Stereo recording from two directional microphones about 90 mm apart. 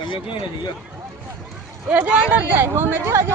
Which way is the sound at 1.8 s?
15° right (ahead or behind).